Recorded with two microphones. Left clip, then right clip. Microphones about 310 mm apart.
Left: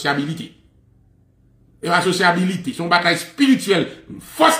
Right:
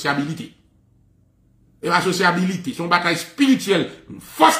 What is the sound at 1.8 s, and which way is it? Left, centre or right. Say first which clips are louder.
A man's voice: left 1 dB; centre.